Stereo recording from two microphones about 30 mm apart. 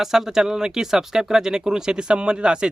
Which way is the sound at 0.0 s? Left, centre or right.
Centre.